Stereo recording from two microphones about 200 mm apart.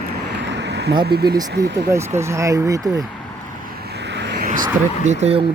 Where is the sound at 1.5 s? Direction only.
60° right (ahead or behind).